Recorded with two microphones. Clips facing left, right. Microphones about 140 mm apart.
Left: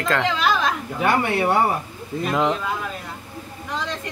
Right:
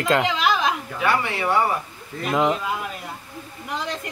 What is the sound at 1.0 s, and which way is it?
Speech, 50° left (ahead or behind).